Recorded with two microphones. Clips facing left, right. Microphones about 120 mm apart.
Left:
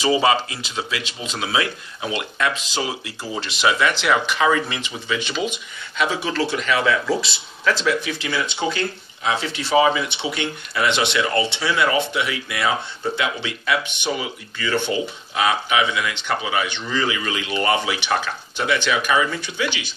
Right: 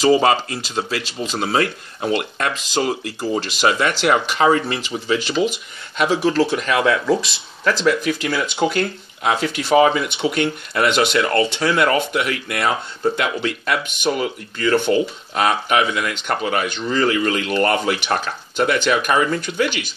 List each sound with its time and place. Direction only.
0.0 s speech: 45° right (ahead or behind)